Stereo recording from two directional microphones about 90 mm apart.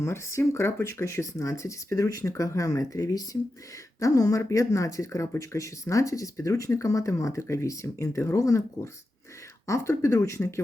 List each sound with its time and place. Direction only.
0.0 s speech: 30° left (ahead or behind)